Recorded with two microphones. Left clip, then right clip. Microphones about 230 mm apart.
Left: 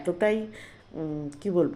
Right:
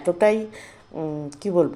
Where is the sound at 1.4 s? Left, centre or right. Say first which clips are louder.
Right 5 dB; centre.